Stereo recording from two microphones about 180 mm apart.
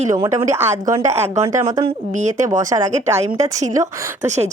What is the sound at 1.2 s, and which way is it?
Speech, 35° right (ahead or behind).